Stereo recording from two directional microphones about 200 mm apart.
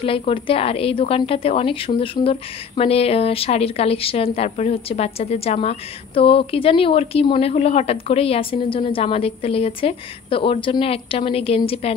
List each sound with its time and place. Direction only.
0.0 s a woman's voice: 25° left (ahead or behind)